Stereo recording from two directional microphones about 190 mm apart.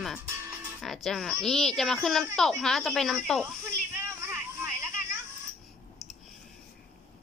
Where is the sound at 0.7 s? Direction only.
Centre (ahead or behind).